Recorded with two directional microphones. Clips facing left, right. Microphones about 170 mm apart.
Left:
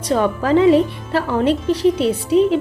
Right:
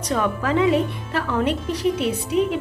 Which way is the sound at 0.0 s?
30° left (ahead or behind).